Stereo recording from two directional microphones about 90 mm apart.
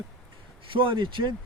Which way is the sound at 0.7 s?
70° right (ahead or behind).